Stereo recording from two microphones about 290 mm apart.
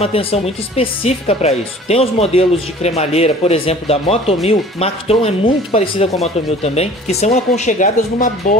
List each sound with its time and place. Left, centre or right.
0.0 s speech: centre